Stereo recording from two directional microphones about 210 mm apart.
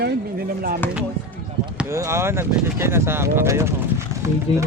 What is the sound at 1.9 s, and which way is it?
Speech, 15° right (ahead or behind).